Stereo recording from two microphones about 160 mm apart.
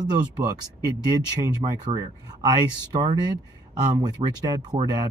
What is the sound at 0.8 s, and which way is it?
Speech, 25° right (ahead or behind).